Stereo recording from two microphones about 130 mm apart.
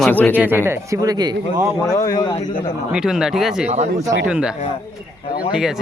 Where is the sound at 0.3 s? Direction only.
15° right (ahead or behind); by 1.6 s 30° right (ahead or behind).